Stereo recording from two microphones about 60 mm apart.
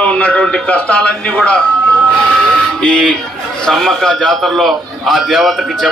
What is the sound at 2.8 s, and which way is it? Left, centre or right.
Speech, centre.